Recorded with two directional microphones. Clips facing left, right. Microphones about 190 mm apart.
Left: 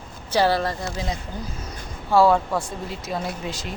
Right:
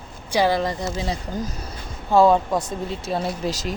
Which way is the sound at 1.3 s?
45° right (ahead or behind).